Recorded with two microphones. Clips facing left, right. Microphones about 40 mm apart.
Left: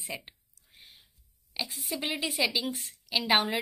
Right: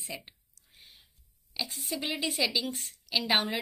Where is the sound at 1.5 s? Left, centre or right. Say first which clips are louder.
Even; centre.